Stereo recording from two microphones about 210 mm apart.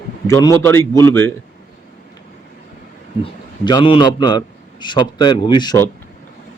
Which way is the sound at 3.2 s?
20° left (ahead or behind).